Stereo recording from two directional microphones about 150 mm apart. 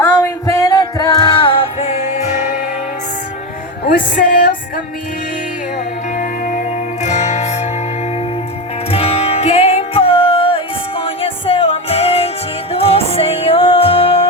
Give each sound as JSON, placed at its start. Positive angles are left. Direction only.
{"t": 0.0, "sound": "music", "side_deg": 20}
{"t": 3.8, "sound": "music", "side_deg": 65}
{"t": 6.1, "sound": "music", "side_deg": 60}
{"t": 8.9, "sound": "music", "side_deg": 40}